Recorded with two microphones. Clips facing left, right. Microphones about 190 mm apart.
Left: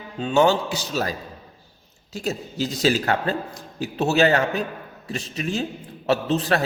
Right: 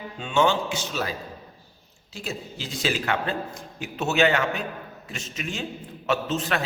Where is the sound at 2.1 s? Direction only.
40° left (ahead or behind).